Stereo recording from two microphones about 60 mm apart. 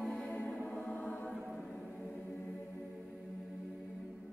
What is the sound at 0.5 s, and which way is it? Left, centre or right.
Music, left.